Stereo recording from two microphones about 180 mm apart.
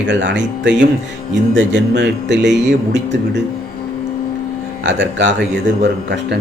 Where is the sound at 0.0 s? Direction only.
85° right.